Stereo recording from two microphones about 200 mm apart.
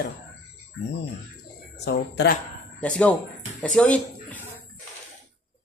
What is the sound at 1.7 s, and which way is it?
Speech, 60° left (ahead or behind).